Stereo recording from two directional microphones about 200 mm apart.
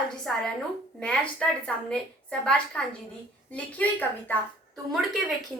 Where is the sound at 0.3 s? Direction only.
5° left (ahead or behind).